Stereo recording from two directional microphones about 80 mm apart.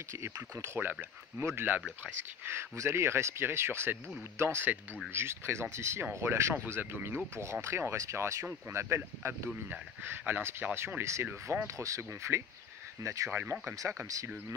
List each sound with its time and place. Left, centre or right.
0.2 s speech: right
9.7 s speech: right
13.3 s speech: right